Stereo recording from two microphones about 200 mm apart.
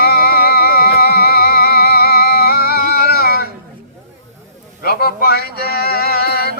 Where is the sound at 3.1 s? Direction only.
50° left (ahead or behind).